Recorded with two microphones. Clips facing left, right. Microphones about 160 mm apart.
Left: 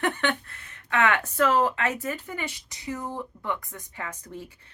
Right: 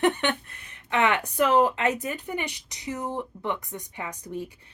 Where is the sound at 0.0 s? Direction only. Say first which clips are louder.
Right 3 dB; 20° right (ahead or behind).